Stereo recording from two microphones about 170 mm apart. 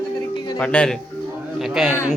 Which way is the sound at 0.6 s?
5° left (ahead or behind).